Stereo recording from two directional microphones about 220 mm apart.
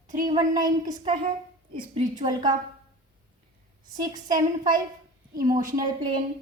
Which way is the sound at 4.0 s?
15° right (ahead or behind).